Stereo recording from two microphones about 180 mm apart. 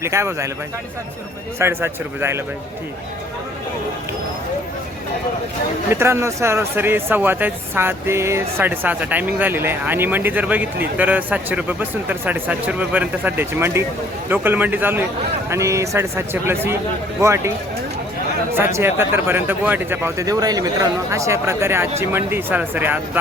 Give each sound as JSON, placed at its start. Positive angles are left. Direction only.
{"t": 0.0, "sound": "speech", "side_deg": -15}
{"t": 1.5, "sound": "speech", "side_deg": -15}
{"t": 5.9, "sound": "speech", "side_deg": -15}
{"t": 18.5, "sound": "speech", "side_deg": -15}